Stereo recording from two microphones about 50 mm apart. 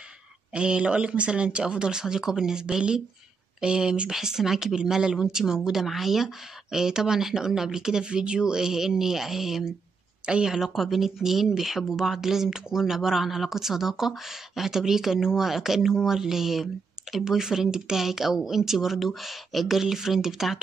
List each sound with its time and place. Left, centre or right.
0.5 s speech: right